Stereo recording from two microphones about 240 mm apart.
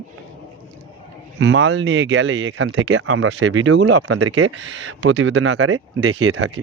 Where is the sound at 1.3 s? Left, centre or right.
Right.